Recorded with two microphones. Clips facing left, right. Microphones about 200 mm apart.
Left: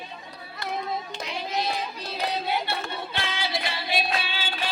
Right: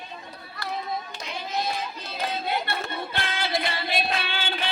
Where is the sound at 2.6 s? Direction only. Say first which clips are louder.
Even; 55° right (ahead or behind).